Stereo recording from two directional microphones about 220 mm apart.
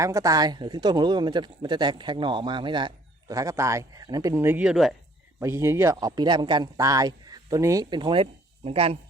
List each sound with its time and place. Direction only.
0.0 s speech: 15° right (ahead or behind)
5.4 s speech: 15° right (ahead or behind)